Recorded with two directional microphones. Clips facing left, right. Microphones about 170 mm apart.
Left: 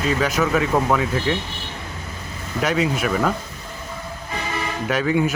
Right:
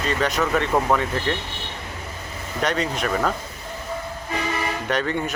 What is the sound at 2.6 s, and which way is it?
Speech, 5° left (ahead or behind).